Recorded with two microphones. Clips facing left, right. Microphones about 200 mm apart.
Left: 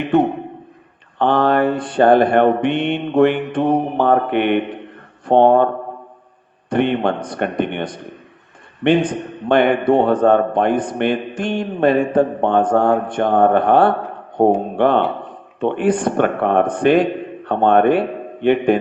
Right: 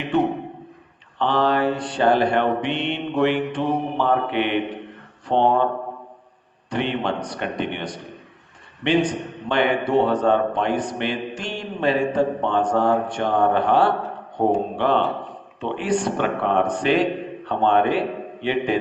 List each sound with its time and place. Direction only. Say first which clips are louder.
1.2 s a man's voice: left 5 dB; 55° left (ahead or behind)
6.7 s a man's voice: left 7 dB; 55° left (ahead or behind)